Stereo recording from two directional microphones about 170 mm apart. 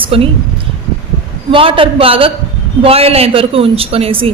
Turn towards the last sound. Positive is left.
turn(degrees=-35)  # may be behind; listen again after turning